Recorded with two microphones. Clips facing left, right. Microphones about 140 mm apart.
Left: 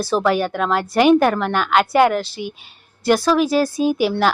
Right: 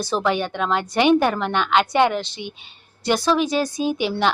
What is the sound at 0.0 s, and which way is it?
A woman's voice, 5° left (ahead or behind).